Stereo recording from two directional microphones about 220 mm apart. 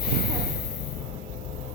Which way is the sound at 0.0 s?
45° left (ahead or behind).